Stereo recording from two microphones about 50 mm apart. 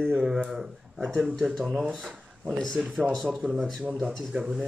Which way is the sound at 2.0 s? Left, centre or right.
Centre.